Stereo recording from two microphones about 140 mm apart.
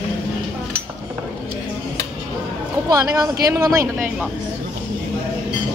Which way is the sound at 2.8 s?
25° right (ahead or behind).